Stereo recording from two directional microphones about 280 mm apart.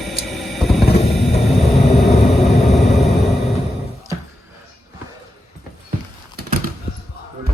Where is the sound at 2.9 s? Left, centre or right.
Centre.